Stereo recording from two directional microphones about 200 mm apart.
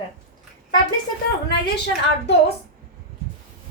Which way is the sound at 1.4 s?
55° left (ahead or behind).